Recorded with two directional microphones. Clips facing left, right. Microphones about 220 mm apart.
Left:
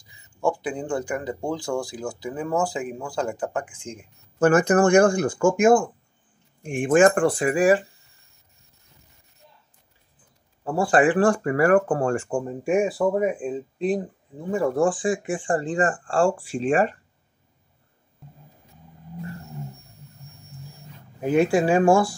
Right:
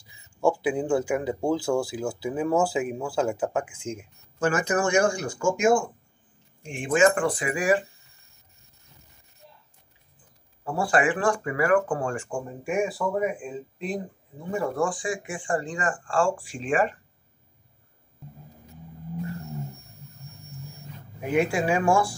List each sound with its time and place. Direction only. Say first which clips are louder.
0.4 s speech: right 2 dB; 10° right (ahead or behind)
4.4 s speech: left 7 dB; 45° left (ahead or behind)
10.6 s speech: left 4 dB; 35° left (ahead or behind)
21.2 s speech: left 5 dB; 35° left (ahead or behind)